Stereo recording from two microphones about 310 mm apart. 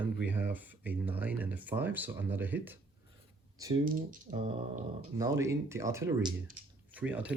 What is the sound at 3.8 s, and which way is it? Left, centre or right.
Speech, right.